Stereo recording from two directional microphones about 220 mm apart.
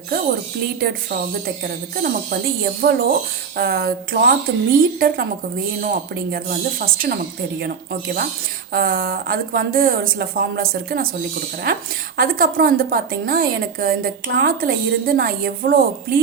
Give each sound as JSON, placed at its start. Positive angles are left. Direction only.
{"t": 1.6, "sound": "a woman's voice", "side_deg": -45}
{"t": 6.3, "sound": "speech", "side_deg": -40}
{"t": 8.7, "sound": "a woman's voice", "side_deg": -40}